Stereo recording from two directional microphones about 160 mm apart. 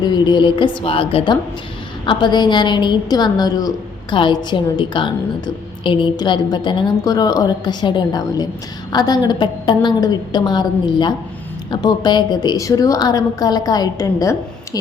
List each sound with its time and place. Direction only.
0.0 s a woman's voice: 30° left (ahead or behind)